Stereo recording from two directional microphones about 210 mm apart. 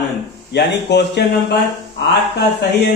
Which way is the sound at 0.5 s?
55° left (ahead or behind).